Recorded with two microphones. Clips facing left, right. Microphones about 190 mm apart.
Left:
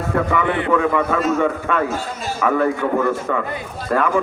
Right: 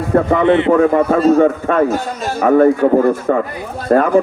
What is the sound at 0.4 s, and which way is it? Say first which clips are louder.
Speech: right 9 dB; 25° right (ahead or behind).